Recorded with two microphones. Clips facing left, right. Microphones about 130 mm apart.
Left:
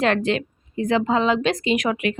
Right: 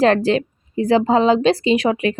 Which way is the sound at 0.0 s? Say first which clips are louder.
Right 5 dB; 35° right (ahead or behind).